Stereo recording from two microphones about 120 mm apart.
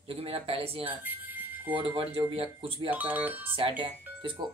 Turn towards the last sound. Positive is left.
turn(degrees=-45)  # may be behind; listen again after turning